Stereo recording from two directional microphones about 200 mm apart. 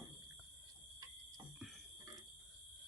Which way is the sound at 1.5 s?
Centre (ahead or behind).